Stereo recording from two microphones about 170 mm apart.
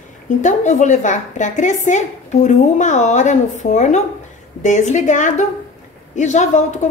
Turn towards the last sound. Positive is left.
turn(degrees=45)  # may be behind; listen again after turning